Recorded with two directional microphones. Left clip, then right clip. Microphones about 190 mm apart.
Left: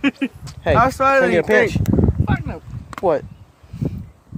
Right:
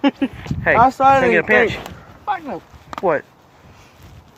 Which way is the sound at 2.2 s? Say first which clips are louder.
Right 3 dB; 45° left (ahead or behind).